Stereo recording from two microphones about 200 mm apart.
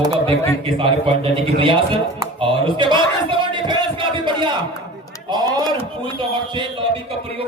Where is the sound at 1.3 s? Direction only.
25° right (ahead or behind).